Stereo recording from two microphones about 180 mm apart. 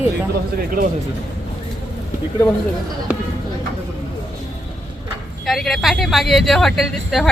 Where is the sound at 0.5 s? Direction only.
55° right (ahead or behind).